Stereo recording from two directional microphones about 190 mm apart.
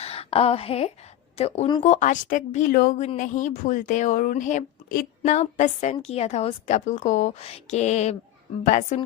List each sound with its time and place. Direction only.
0.0 s a woman's voice: 30° left (ahead or behind)
1.8 s a woman's voice: 40° left (ahead or behind)